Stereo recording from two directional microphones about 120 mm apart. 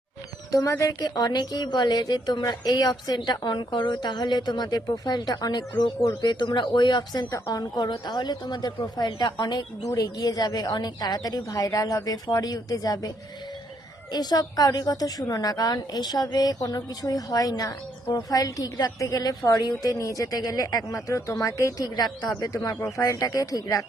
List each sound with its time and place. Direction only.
0.5 s a woman's voice: 25° left (ahead or behind)